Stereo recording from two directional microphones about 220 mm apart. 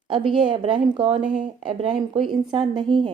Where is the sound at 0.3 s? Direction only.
20° right (ahead or behind).